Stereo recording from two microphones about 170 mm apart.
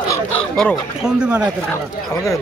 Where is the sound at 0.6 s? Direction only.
Centre (ahead or behind).